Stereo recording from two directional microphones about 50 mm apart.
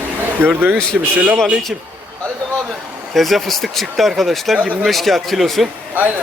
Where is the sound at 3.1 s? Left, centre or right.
Centre.